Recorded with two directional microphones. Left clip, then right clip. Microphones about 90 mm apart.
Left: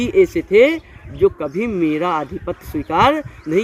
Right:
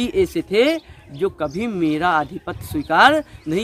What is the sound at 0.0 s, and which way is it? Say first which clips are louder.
Speech: left 5 dB; 50° right (ahead or behind).